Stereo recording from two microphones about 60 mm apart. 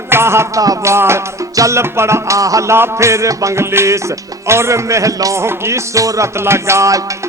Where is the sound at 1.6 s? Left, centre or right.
Right.